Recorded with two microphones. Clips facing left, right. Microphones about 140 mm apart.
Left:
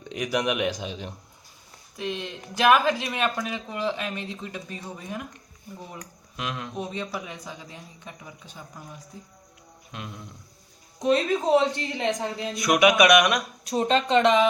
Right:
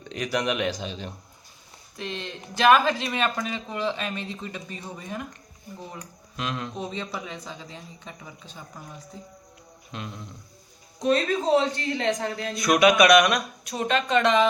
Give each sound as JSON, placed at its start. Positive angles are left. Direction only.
{"t": 0.0, "sound": "a man's voice", "side_deg": 15}
{"t": 6.3, "sound": "a man's voice", "side_deg": 10}
{"t": 11.0, "sound": "a man's voice", "side_deg": 20}
{"t": 13.7, "sound": "speech", "side_deg": 30}